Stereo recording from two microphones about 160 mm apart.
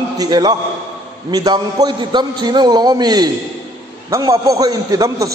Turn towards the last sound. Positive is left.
turn(degrees=-20)  # may be behind; listen again after turning